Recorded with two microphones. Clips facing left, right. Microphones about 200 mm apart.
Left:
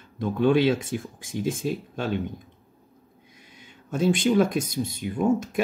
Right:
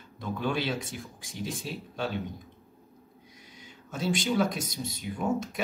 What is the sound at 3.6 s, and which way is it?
Speech, 55° left (ahead or behind).